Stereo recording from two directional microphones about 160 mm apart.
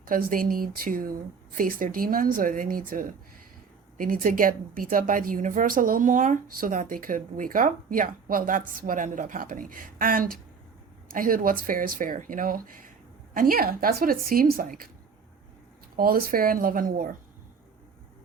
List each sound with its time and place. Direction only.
0.0 s a woman's voice: 60° right (ahead or behind)
16.0 s a woman's voice: 65° right (ahead or behind)